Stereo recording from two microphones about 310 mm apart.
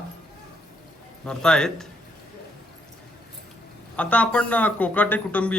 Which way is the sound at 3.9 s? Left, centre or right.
Centre.